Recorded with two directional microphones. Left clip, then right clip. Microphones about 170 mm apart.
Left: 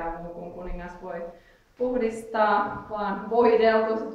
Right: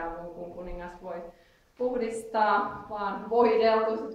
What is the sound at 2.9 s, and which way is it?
Speech, 15° right (ahead or behind).